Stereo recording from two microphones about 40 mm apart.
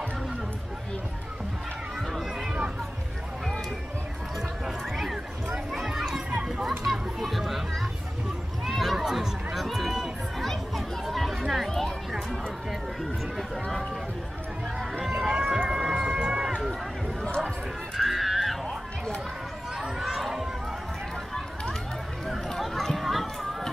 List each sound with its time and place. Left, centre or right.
4.9 s a sound: centre
6.3 s children playing: right
6.8 s children playing: centre
8.6 s a sound: centre
13.0 s chatter: centre
15.0 s run: centre
17.9 s music: centre
20.1 s run: centre
22.5 s a sound: centre